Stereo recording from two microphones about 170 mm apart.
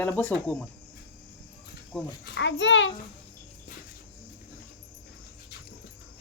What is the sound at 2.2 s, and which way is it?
Speech, 90° left.